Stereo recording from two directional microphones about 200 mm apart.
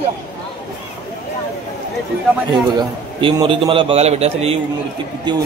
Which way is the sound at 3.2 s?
25° right (ahead or behind).